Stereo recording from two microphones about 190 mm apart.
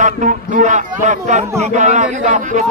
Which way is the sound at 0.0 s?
40° right (ahead or behind).